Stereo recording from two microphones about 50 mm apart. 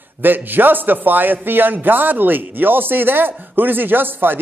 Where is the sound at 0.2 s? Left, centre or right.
Right.